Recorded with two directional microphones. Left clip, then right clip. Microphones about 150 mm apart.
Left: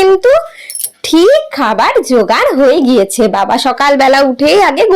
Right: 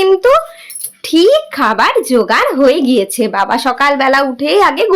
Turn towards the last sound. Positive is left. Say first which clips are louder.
# left 3 dB
turn(degrees=25)  # may be behind; listen again after turning